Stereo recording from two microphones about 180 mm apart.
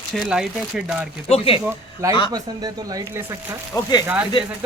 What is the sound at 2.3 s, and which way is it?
Speech, 20° right (ahead or behind).